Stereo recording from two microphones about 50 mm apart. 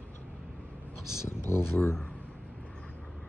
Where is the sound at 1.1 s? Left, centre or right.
Left.